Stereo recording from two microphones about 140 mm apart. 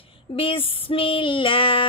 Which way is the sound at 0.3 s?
40° left (ahead or behind).